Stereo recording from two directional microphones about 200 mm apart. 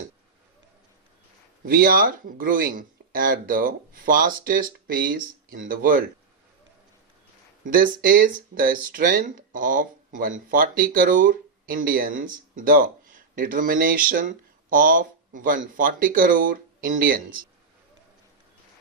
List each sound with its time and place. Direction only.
1.6 s speech: 45° right (ahead or behind)
7.6 s speech: 45° right (ahead or behind)